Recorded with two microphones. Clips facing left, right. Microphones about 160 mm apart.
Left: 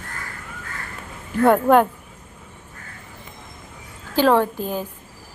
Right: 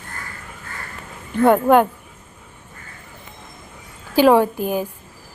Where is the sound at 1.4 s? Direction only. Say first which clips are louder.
Right 1 dB; centre (ahead or behind).